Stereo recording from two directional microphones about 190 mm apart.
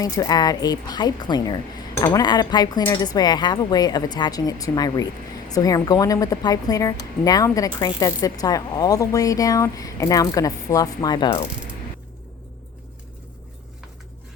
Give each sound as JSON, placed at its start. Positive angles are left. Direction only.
{"t": 0.0, "sound": "a woman's voice", "side_deg": 20}